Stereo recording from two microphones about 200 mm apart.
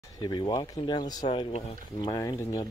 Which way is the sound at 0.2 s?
20° left (ahead or behind).